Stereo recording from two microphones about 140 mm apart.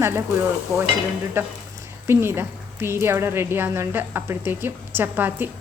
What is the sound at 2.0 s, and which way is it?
Speech, 15° right (ahead or behind).